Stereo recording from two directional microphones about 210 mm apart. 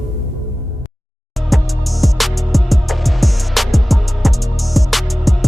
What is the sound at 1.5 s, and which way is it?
Music, centre (ahead or behind).